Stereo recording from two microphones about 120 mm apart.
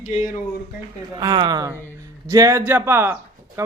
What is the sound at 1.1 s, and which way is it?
Speech, 35° right (ahead or behind).